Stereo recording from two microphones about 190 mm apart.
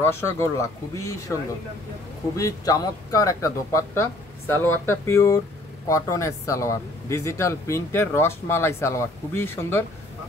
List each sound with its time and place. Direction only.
0.0 s speech: 15° left (ahead or behind)